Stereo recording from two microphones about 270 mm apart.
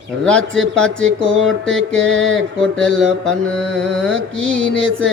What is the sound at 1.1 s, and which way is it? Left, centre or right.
Music, right.